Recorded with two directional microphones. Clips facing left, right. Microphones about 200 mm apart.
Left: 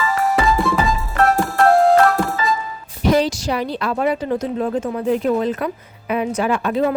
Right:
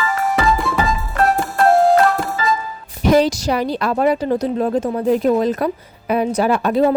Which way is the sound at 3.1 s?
45° right (ahead or behind).